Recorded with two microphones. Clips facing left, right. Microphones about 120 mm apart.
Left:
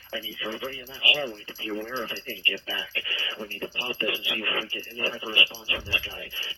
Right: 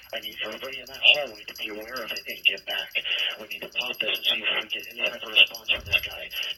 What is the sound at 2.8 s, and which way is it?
Speech, 25° left (ahead or behind).